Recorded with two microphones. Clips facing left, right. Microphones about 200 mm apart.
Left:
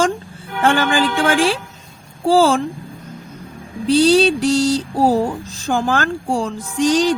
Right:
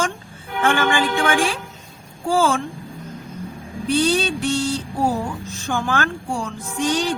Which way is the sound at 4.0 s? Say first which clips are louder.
Left 8 dB; 30° left (ahead or behind).